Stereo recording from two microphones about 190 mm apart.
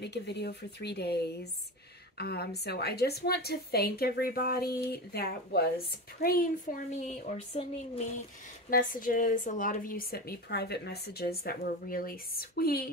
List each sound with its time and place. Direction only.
0.0 s a woman's voice: 60° left (ahead or behind); by 7.3 s 40° left (ahead or behind)
8.6 s speech: 45° left (ahead or behind)